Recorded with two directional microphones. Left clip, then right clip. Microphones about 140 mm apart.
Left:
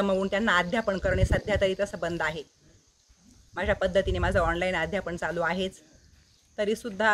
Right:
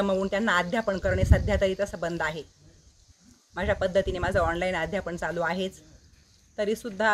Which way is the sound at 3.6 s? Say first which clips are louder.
Even; centre (ahead or behind).